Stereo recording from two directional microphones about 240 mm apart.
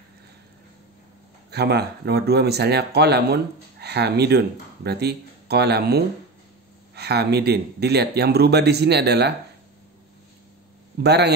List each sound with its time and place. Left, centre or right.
1.5 s speech: right
11.0 s speech: right